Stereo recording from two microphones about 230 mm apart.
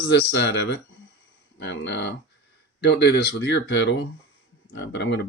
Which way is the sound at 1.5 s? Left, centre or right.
Left.